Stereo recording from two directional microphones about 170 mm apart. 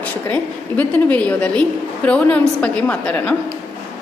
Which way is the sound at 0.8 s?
10° left (ahead or behind).